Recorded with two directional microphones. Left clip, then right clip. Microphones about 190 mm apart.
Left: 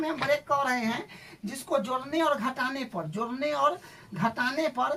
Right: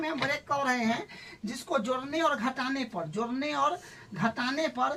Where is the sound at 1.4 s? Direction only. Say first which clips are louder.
Left 2 dB; 30° left (ahead or behind).